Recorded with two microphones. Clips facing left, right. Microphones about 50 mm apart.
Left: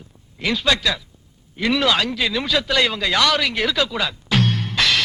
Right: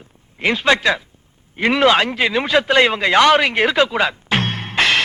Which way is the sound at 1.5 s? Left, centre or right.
Right.